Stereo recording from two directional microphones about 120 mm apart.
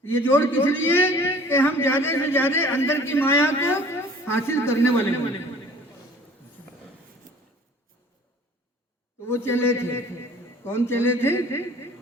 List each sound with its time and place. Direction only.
0.0 s a man's voice: 20° left (ahead or behind)
9.2 s a man's voice: 20° left (ahead or behind)